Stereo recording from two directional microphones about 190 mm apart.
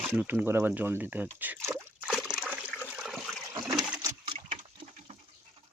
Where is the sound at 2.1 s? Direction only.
Centre (ahead or behind).